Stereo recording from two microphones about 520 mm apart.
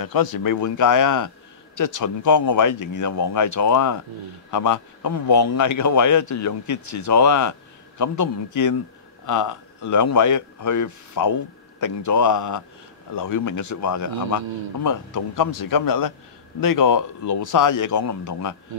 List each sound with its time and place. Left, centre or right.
0.0 s a man's voice: left